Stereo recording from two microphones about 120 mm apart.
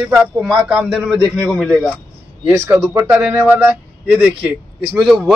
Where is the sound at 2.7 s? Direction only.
25° right (ahead or behind).